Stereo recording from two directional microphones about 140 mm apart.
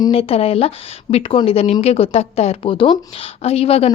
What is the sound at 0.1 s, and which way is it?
A woman's voice, 45° left (ahead or behind).